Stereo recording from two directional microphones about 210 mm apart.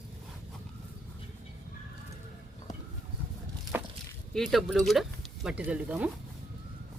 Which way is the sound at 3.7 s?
10° right (ahead or behind).